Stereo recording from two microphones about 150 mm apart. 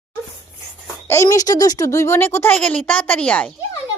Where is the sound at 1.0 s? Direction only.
20° left (ahead or behind).